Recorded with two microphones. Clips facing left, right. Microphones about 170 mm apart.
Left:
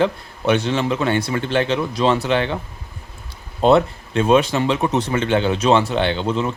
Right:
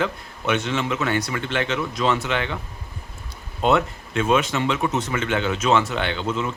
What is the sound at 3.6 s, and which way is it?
Speech, 35° left (ahead or behind).